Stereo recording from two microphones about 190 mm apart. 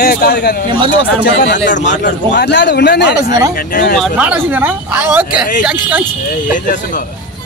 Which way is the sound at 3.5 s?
50° left (ahead or behind).